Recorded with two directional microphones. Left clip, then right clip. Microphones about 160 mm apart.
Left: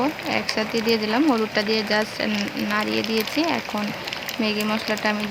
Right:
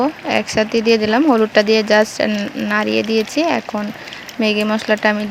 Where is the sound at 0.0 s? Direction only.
40° right (ahead or behind).